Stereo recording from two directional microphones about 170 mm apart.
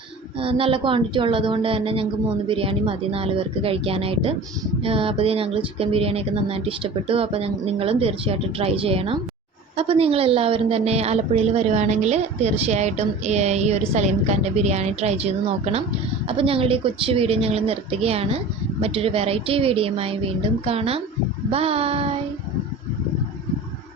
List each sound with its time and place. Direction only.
0.3 s a woman's voice: 30° right (ahead or behind)